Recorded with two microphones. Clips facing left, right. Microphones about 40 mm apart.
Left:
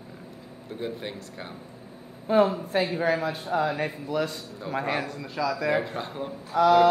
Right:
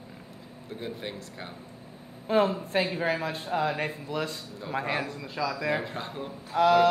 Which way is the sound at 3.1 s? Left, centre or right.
Right.